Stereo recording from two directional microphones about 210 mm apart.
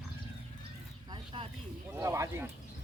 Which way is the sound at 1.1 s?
25° right (ahead or behind).